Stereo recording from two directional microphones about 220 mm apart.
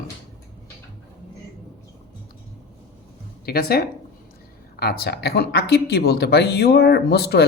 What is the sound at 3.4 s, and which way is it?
Speech, 45° left (ahead or behind).